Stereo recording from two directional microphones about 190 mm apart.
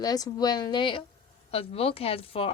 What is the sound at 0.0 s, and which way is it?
Speech, 20° left (ahead or behind).